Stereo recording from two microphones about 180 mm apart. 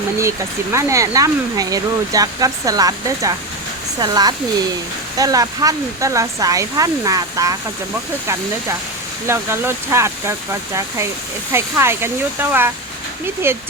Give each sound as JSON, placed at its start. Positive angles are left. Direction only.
{"t": 0.2, "sound": "speech", "side_deg": -15}
{"t": 9.2, "sound": "speech", "side_deg": -15}